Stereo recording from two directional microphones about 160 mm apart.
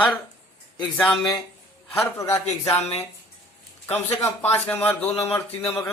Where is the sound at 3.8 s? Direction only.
15° left (ahead or behind).